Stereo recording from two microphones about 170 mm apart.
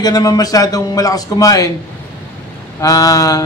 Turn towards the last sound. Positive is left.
turn(degrees=20)  # may be behind; listen again after turning